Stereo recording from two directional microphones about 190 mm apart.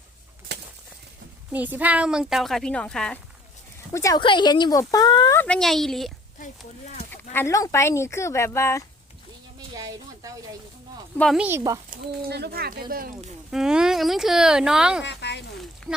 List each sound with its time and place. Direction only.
1.5 s speech: 10° right (ahead or behind)
3.9 s speech: 20° left (ahead or behind)
5.4 s speech: 5° left (ahead or behind)
7.1 s speech: 15° left (ahead or behind)
9.7 s a sound: 20° right (ahead or behind)
11.2 s speech: centre (ahead or behind)
11.4 s speech: 15° right (ahead or behind)
11.9 s speech: 55° right (ahead or behind)
13.5 s speech: 5° right (ahead or behind)
15.0 s a sound: 65° left (ahead or behind)
15.8 s speech: 5° left (ahead or behind)